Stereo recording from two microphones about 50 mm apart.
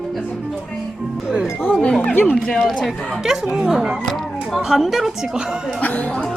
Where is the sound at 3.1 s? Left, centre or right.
Centre.